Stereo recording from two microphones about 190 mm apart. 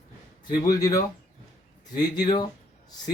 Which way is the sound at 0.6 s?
20° left (ahead or behind).